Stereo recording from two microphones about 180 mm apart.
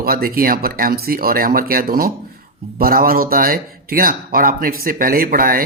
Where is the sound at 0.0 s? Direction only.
55° right (ahead or behind).